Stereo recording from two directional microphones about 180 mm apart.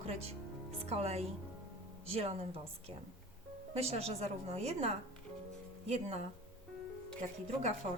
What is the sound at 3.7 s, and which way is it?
A woman's voice, 35° right (ahead or behind).